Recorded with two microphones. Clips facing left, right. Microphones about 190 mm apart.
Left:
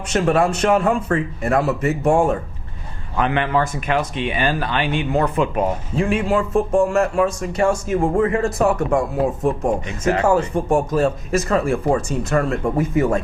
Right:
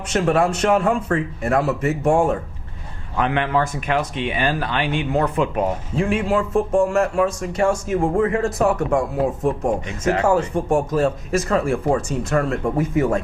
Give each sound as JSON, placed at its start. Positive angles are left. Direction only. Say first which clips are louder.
{"t": 0.1, "sound": "speech", "louder": "left 1 dB", "side_deg": 15}
{"t": 10.1, "sound": "speech", "louder": "left 1 dB", "side_deg": 20}